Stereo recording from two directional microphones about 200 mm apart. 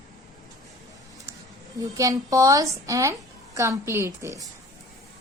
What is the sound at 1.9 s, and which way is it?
A woman's voice, 15° right (ahead or behind).